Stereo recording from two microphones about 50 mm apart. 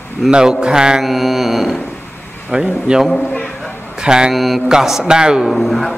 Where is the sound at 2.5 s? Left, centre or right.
Centre.